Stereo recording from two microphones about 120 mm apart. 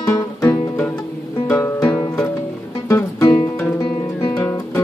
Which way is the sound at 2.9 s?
25° left (ahead or behind).